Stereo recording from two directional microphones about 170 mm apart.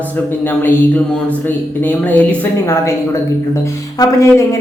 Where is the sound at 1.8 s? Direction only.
10° left (ahead or behind).